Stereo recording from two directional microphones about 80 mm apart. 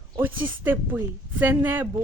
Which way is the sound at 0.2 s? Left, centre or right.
Right.